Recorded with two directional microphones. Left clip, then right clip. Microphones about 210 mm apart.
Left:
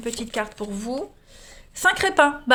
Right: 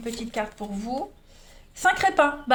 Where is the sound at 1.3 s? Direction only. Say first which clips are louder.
Left 5 dB; 40° left (ahead or behind).